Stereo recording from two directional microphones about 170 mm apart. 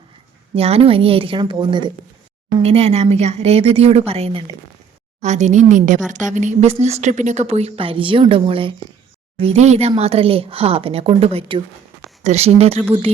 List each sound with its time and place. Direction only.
0.5 s a woman's voice: 35° right (ahead or behind)